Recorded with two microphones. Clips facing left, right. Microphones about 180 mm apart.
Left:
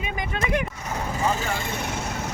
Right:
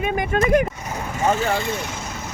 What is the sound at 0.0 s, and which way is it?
Speech, 50° right (ahead or behind).